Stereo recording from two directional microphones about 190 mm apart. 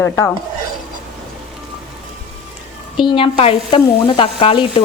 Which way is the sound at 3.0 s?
25° left (ahead or behind).